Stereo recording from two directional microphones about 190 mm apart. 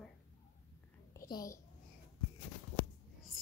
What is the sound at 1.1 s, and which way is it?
Speech, 20° left (ahead or behind).